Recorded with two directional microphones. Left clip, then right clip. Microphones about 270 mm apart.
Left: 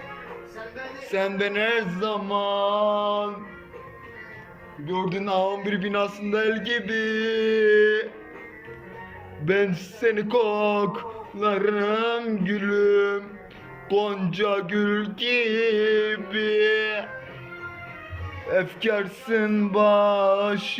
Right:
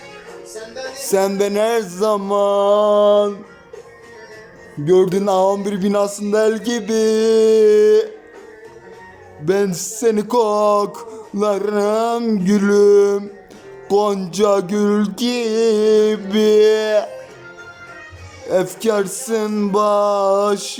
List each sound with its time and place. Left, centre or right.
1.0 s speech: right
4.9 s speech: right
9.5 s speech: centre
18.4 s music: centre